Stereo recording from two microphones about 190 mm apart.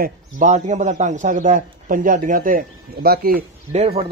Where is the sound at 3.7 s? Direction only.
30° right (ahead or behind).